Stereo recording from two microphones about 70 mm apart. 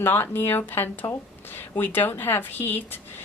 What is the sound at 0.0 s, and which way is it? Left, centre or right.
A woman's voice, left.